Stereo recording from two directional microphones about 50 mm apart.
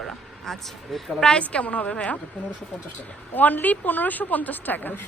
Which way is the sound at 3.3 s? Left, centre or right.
Left.